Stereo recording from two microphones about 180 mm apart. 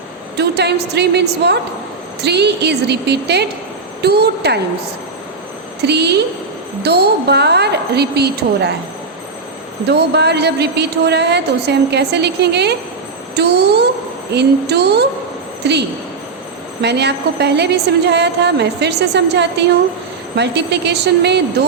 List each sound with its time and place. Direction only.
0.3 s a woman's voice: 65° right (ahead or behind)
5.8 s a woman's voice: 70° right (ahead or behind)
9.8 s a woman's voice: 70° right (ahead or behind)
16.8 s a woman's voice: 70° right (ahead or behind)